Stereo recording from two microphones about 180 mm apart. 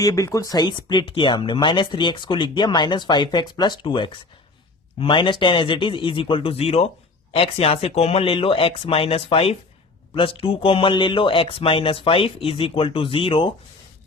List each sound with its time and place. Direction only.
0.0 s speech: 20° left (ahead or behind)